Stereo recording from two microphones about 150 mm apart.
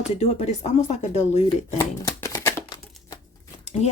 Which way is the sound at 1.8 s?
20° left (ahead or behind).